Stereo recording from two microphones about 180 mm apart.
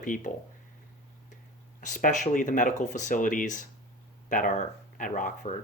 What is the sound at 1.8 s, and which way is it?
Speech, 45° left (ahead or behind).